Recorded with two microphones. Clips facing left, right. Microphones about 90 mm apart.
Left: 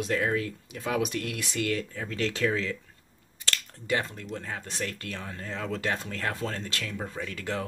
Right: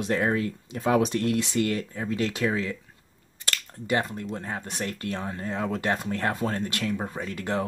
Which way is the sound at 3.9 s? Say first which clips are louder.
Right 3 dB; 20° right (ahead or behind).